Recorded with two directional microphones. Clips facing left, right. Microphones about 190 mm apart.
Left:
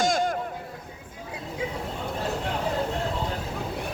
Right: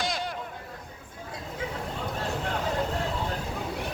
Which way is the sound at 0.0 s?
45° left (ahead or behind).